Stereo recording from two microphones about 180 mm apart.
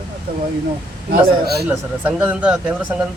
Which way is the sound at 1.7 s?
10° right (ahead or behind).